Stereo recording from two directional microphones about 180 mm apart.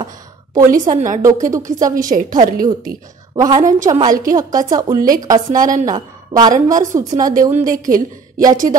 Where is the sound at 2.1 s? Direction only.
45° right (ahead or behind).